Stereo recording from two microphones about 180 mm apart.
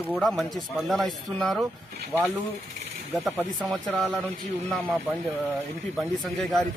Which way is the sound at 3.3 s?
Centre (ahead or behind).